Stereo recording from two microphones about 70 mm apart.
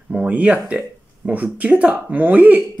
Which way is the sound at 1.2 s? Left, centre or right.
Centre.